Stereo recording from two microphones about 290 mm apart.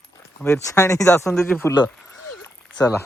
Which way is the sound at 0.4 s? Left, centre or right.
Centre.